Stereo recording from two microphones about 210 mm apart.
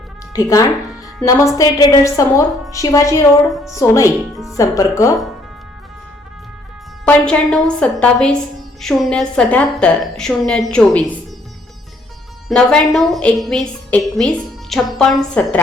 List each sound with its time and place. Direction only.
0.3 s a woman's voice: 15° left (ahead or behind)
7.0 s a woman's voice: 5° left (ahead or behind)
12.5 s a woman's voice: 5° left (ahead or behind)